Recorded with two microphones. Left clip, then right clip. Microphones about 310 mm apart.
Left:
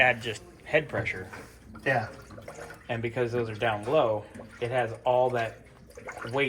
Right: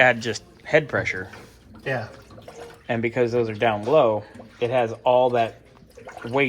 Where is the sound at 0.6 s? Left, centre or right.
Right.